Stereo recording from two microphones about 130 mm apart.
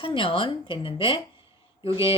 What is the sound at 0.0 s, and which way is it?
Speech, 40° left (ahead or behind).